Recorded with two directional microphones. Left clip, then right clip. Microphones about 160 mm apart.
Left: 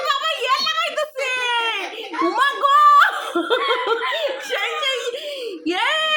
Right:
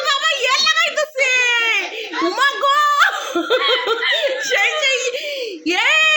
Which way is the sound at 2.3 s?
25° right (ahead or behind).